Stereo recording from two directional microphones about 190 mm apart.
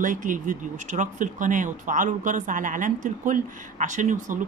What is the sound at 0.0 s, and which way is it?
Speech, 45° right (ahead or behind).